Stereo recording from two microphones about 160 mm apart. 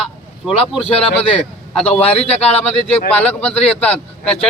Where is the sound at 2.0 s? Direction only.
40° left (ahead or behind).